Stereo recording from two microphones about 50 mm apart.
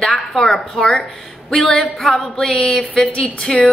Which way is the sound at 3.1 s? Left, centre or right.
Left.